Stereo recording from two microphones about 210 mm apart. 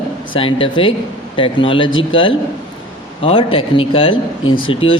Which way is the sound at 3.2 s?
25° left (ahead or behind).